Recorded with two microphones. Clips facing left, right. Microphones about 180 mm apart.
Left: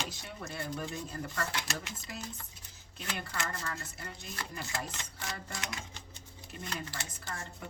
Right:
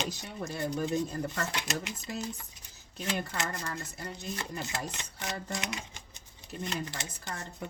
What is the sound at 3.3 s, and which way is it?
Speech, 20° right (ahead or behind).